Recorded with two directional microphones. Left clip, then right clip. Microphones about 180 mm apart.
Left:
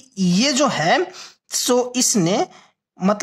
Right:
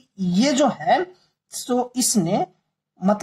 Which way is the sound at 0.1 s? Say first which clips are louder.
Left 2 dB; 45° left (ahead or behind).